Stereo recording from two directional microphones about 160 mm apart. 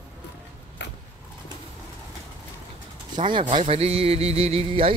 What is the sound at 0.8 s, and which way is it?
Vehicle, 90° left.